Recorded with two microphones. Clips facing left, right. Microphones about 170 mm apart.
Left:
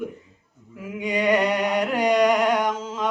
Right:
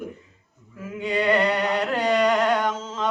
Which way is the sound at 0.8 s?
15° left (ahead or behind).